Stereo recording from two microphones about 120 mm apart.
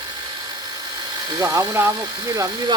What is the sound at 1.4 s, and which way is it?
Speech, 25° right (ahead or behind).